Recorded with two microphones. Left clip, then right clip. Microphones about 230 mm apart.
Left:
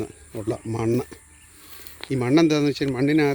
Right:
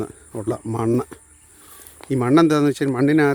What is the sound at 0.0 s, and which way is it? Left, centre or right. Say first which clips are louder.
Speech: right 3 dB; right.